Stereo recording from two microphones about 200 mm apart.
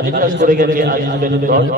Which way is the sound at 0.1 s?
40° right (ahead or behind).